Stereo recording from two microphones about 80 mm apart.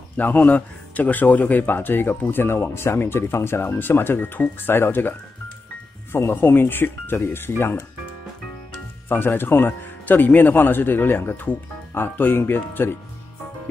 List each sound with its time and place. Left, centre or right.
0.2 s speech: left
6.1 s speech: left
9.1 s speech: left